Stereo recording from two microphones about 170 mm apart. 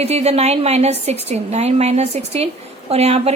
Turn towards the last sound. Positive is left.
turn(degrees=-40)  # may be behind; listen again after turning